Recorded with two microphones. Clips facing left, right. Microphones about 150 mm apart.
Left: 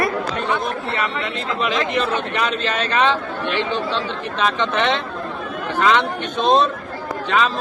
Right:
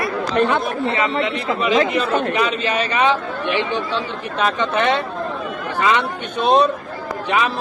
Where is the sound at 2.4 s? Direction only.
10° right (ahead or behind).